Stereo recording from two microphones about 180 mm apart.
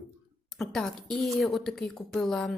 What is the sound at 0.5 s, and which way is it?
A woman's voice, 5° left (ahead or behind).